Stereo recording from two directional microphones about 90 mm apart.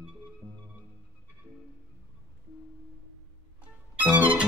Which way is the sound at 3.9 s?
20° right (ahead or behind).